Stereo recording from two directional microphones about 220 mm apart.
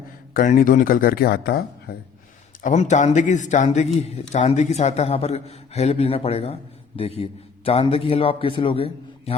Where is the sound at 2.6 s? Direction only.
35° left (ahead or behind).